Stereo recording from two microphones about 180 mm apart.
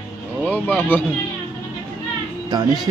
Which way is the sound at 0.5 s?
10° left (ahead or behind).